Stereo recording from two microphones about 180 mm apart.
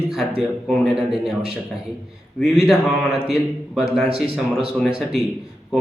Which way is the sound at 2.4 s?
Centre (ahead or behind).